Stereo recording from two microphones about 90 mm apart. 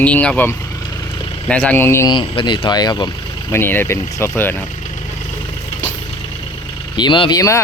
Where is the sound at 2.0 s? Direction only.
75° left (ahead or behind); by 3.1 s 55° left (ahead or behind).